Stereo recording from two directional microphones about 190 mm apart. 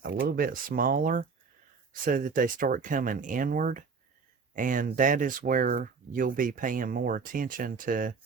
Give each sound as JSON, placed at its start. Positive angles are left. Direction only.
{"t": 0.0, "sound": "speech", "side_deg": -55}